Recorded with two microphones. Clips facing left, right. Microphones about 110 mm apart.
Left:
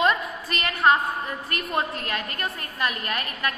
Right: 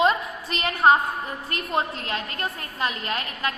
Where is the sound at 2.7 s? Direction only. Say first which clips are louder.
Even; 20° right (ahead or behind).